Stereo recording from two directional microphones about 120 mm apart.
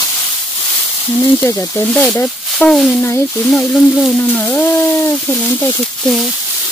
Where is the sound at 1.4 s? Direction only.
15° left (ahead or behind).